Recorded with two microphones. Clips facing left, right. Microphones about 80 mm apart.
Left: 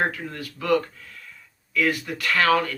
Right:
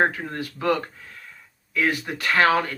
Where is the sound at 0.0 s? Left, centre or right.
Right.